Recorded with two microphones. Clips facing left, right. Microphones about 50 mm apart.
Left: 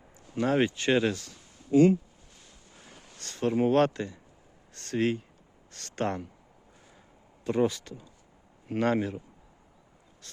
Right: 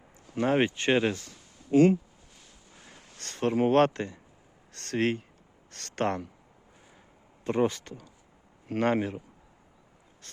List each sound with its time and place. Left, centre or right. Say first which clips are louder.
0.3 s speech: right 1 dB; right
3.2 s a sound: right 1 dB; right
3.7 s speech: right 1 dB; right
4.7 s speech: even; right
7.4 s speech: even; right